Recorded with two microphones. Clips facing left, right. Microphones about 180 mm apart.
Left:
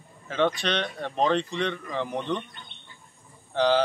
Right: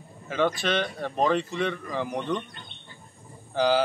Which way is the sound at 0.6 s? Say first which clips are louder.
Right 2 dB; 5° right (ahead or behind).